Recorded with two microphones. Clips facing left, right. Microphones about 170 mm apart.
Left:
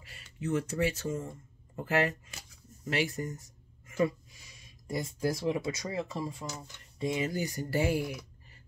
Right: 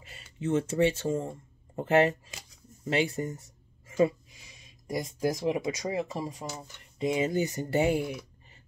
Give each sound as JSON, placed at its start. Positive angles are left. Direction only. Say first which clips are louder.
{"t": 0.0, "sound": "speech", "louder": "right 3 dB", "side_deg": -25}